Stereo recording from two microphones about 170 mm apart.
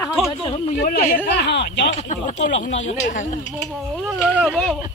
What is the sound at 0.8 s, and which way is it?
Speech, 70° left (ahead or behind).